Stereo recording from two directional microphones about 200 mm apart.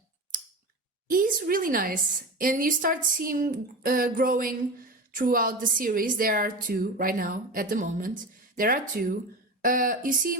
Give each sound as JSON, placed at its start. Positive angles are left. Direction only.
{"t": 1.1, "sound": "a woman's voice", "side_deg": -45}